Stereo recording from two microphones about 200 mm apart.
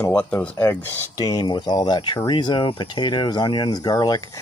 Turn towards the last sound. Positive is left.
turn(degrees=20)  # may be behind; listen again after turning